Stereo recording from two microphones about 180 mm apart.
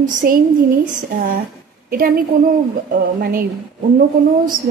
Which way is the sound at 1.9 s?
55° right (ahead or behind).